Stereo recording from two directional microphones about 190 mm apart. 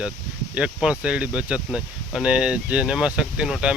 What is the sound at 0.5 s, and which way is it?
Speech, 5° right (ahead or behind).